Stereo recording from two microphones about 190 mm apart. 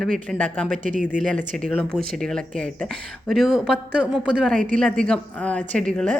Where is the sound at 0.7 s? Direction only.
45° right (ahead or behind).